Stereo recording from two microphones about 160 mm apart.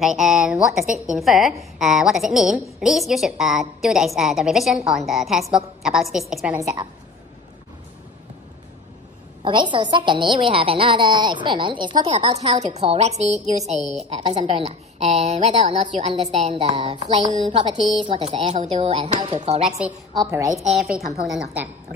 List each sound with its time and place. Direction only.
0.0 s a woman's voice: centre (ahead or behind)
9.4 s a woman's voice: 30° right (ahead or behind)
12.1 s a woman's voice: 40° right (ahead or behind)
20.2 s a woman's voice: 20° right (ahead or behind)
20.5 s a woman's voice: centre (ahead or behind)